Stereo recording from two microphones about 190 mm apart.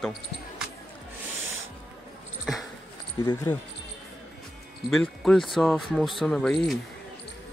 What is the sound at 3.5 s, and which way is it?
Speech, 10° left (ahead or behind).